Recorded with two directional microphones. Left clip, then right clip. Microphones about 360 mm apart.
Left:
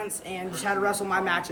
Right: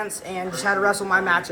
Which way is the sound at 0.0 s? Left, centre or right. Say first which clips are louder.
Right 5 dB; centre.